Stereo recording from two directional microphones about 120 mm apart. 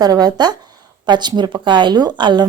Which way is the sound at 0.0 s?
35° right (ahead or behind).